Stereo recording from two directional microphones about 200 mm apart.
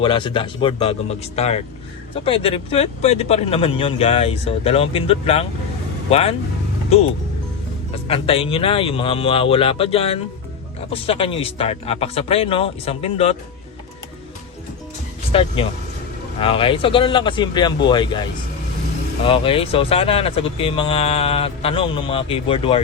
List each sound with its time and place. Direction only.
0.0 s speech: 25° left (ahead or behind)
7.9 s speech: 30° left (ahead or behind)
15.3 s speech: 25° left (ahead or behind)